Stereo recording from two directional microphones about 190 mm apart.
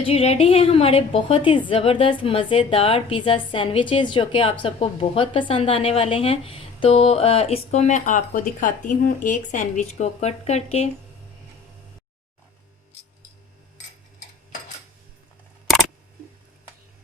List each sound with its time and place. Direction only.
0.0 s a woman's voice: 30° left (ahead or behind)